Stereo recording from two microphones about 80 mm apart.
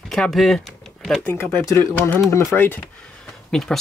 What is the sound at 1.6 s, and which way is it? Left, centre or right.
Speech, left.